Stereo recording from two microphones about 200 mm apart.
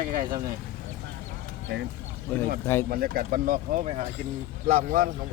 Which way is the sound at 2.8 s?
50° right (ahead or behind).